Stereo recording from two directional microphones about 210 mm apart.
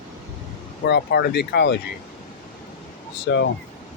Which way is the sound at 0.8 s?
50° left (ahead or behind).